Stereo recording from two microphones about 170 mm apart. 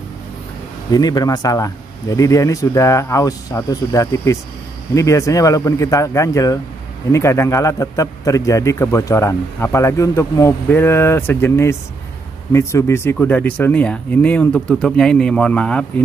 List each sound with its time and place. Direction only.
0.9 s a man's voice: 25° left (ahead or behind); by 15.8 s 5° left (ahead or behind)